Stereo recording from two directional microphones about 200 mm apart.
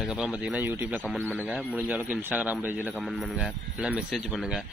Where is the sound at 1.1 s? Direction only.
5° left (ahead or behind).